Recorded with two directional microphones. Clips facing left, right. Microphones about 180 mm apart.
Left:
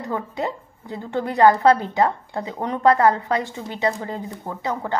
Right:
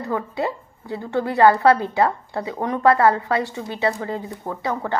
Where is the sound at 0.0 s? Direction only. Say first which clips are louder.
Right 2 dB; 20° left (ahead or behind).